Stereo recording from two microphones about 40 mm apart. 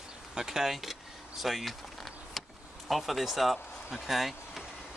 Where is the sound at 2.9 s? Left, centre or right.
Centre.